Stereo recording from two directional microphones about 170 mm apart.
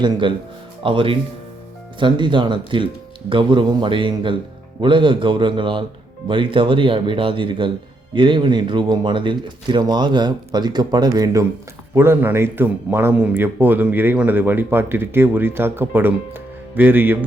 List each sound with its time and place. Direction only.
0.0 s speech: 30° right (ahead or behind); by 17.2 s 10° right (ahead or behind)